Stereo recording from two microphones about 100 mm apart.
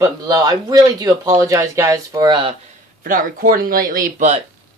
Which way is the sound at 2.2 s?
55° right (ahead or behind).